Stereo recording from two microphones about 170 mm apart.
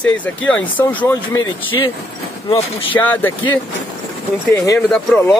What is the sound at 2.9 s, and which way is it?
Speech, 10° left (ahead or behind).